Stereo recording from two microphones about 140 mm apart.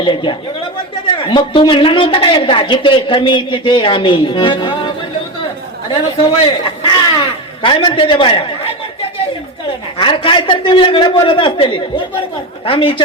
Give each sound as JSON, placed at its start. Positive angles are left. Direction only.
{"t": 0.0, "sound": "a woman's voice", "side_deg": 35}
{"t": 6.7, "sound": "a sound", "side_deg": 35}
{"t": 10.0, "sound": "a woman's voice", "side_deg": 35}